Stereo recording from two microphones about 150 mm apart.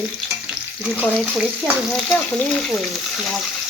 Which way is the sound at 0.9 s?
5° right (ahead or behind).